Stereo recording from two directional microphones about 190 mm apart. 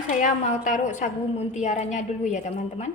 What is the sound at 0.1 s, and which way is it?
A woman's voice, 40° left (ahead or behind).